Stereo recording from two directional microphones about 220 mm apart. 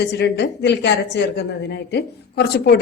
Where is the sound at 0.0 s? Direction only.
50° left (ahead or behind).